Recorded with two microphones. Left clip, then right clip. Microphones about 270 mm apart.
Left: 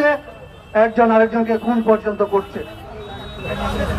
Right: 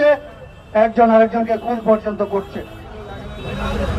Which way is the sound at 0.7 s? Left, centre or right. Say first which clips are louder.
Right 1 dB; right.